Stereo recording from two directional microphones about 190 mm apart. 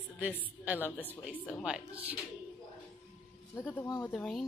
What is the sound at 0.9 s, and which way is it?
Speech, 10° left (ahead or behind).